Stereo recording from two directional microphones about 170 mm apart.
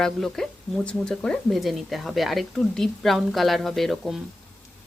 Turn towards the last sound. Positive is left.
turn(degrees=0)  # may be behind; listen again after turning